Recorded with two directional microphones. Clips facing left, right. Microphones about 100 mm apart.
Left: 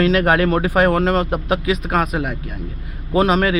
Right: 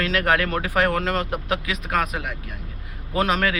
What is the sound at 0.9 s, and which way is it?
A man's voice, 30° left (ahead or behind).